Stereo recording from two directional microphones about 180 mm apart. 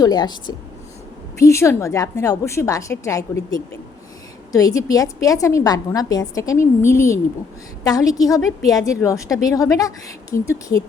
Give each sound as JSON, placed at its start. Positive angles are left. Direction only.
{"t": 0.0, "sound": "a woman's voice", "side_deg": 25}